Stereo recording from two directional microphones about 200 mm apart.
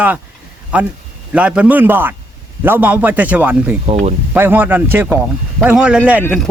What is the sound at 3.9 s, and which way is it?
Speech, 35° right (ahead or behind).